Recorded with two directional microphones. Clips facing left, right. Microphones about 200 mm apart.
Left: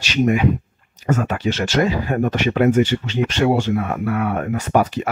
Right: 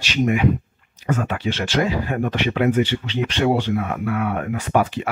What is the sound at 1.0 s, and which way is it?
Speech, 40° left (ahead or behind).